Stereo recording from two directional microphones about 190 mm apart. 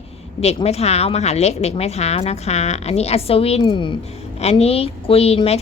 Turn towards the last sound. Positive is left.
turn(degrees=35)  # may be behind; listen again after turning